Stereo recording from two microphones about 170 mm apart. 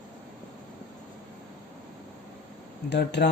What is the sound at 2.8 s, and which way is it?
Speech, 85° left.